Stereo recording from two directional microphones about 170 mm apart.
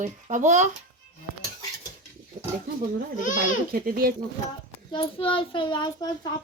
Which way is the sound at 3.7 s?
60° right (ahead or behind).